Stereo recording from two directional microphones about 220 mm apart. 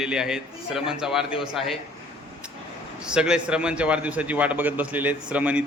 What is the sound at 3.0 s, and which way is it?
A man's voice, 5° right (ahead or behind).